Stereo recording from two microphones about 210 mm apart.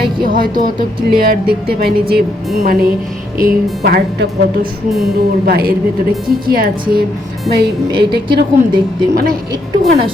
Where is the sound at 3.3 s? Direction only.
45° right (ahead or behind).